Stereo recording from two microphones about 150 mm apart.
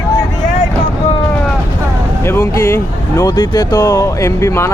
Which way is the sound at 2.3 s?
20° left (ahead or behind).